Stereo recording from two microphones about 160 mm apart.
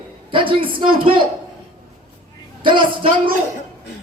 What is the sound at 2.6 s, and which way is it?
Speech, 30° right (ahead or behind).